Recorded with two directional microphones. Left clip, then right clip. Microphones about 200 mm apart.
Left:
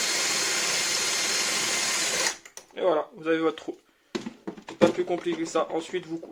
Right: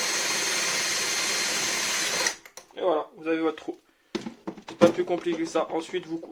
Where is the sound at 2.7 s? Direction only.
25° left (ahead or behind).